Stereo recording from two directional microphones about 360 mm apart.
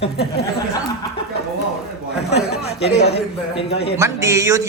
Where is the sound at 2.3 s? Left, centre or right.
Left.